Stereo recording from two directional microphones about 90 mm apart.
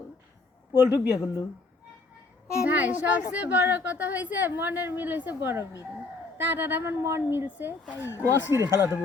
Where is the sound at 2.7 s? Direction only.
20° right (ahead or behind).